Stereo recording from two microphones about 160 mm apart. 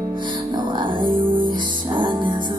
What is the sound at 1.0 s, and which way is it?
Music, 60° right (ahead or behind).